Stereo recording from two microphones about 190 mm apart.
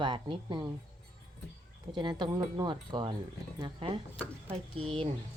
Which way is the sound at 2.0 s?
25° right (ahead or behind).